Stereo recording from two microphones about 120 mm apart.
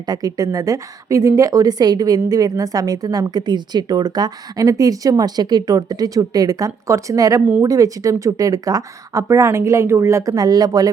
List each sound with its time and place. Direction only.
0.0 s a woman's voice: 35° right (ahead or behind)